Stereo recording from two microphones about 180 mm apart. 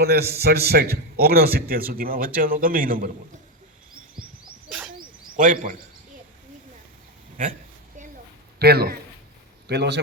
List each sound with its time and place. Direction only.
0.0 s a man's voice: 60° right (ahead or behind)
5.4 s speech: 50° right (ahead or behind)
8.5 s a man's voice: 60° right (ahead or behind)